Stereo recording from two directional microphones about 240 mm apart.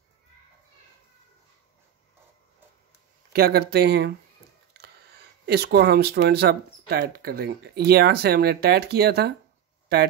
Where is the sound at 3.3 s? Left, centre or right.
Right.